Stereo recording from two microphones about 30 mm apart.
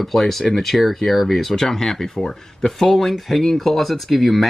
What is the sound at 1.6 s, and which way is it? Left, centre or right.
Speech, centre.